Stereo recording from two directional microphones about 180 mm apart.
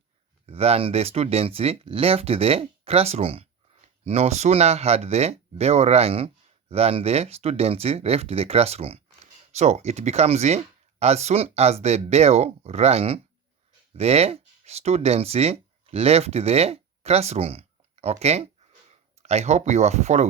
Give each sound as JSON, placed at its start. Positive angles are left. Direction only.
{"t": 0.4, "sound": "speech", "side_deg": -35}